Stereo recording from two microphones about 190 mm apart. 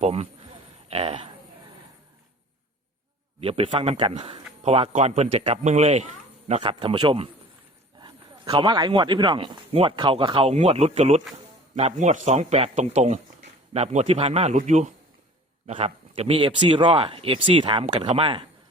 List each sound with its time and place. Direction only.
0.0 s a man's voice: 30° right (ahead or behind)
3.4 s a man's voice: 30° right (ahead or behind)